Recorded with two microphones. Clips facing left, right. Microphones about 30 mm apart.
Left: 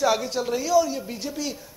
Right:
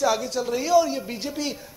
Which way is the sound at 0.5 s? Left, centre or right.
Centre.